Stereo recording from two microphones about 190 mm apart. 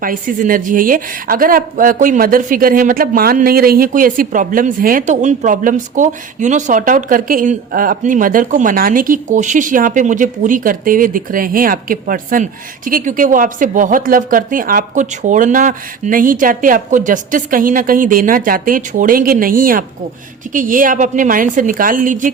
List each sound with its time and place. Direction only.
0.0 s speech: 45° right (ahead or behind)